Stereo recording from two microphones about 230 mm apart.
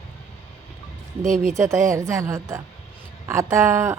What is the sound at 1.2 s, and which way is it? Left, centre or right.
Speech, right.